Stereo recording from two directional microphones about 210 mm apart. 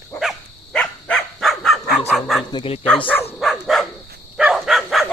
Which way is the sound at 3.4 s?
Centre (ahead or behind).